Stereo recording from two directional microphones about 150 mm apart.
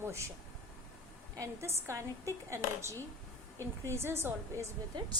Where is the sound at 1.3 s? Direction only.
20° right (ahead or behind).